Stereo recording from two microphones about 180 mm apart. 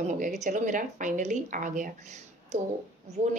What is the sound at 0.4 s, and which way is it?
A woman's voice, 45° right (ahead or behind).